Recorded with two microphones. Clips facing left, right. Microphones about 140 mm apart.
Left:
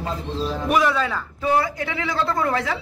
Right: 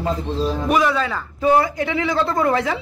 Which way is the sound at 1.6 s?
20° right (ahead or behind).